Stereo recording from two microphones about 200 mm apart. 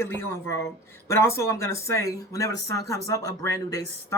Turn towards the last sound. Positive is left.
turn(degrees=15)  # may be behind; listen again after turning